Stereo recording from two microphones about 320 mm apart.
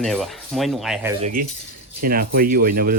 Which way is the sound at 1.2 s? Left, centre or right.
Right.